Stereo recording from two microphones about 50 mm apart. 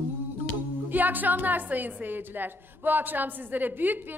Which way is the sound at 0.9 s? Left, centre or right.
Right.